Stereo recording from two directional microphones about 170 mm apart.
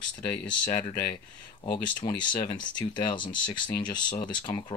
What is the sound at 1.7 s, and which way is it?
Speech, 25° left (ahead or behind).